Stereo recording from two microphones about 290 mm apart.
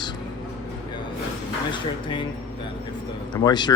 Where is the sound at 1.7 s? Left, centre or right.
Centre.